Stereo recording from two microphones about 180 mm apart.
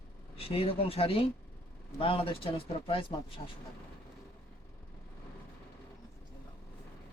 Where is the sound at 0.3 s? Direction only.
30° left (ahead or behind).